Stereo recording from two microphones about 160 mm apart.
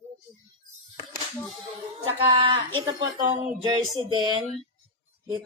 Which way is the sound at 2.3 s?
35° right (ahead or behind).